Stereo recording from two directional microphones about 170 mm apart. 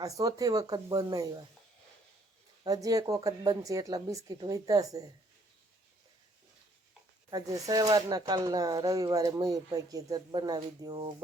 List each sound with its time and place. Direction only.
0.0 s speech: 20° right (ahead or behind)
2.6 s speech: 20° right (ahead or behind)
7.3 s speech: 20° right (ahead or behind)